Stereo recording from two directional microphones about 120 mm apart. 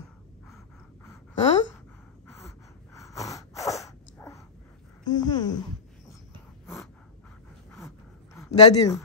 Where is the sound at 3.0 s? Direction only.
25° left (ahead or behind).